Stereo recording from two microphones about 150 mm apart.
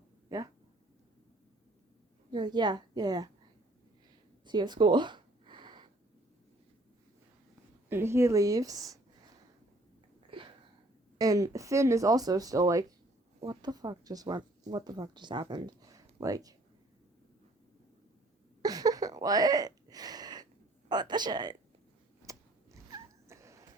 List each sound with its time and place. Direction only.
2.3 s speech: 30° right (ahead or behind)
4.4 s a sound: 30° right (ahead or behind)
7.9 s speech: 15° right (ahead or behind)
10.3 s wheeze: 35° right (ahead or behind)
11.2 s speech: 25° right (ahead or behind)
18.6 s a sound: 25° right (ahead or behind)